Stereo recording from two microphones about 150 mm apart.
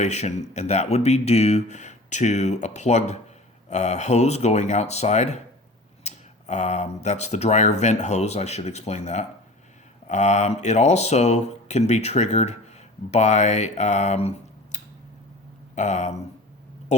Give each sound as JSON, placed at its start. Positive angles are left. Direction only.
{"t": 0.0, "sound": "speech", "side_deg": 50}